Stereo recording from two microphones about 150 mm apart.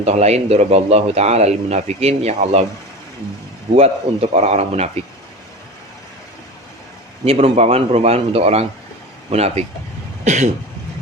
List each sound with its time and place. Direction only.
0.0 s speech: 45° right (ahead or behind)
3.8 s speech: 45° right (ahead or behind)
7.3 s speech: 40° right (ahead or behind)